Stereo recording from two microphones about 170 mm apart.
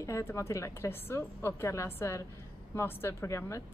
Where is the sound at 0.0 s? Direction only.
15° left (ahead or behind).